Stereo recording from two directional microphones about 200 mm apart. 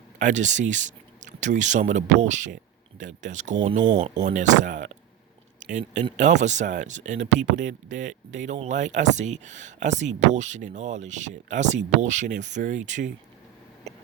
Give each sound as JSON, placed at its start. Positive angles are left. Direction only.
{"t": 0.2, "sound": "speech", "side_deg": -40}